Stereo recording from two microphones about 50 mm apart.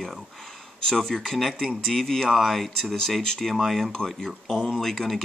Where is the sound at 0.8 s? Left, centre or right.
Centre.